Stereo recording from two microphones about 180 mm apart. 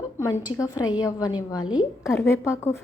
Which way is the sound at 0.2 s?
20° left (ahead or behind).